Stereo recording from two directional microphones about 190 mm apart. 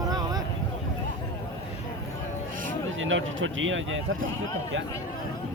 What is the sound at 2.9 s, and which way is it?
Speech, 90° right.